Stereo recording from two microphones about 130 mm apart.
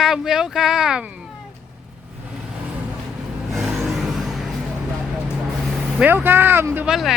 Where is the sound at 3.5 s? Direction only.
Centre (ahead or behind).